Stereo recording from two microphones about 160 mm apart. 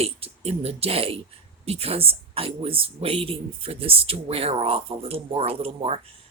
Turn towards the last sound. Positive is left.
turn(degrees=-40)  # may be behind; listen again after turning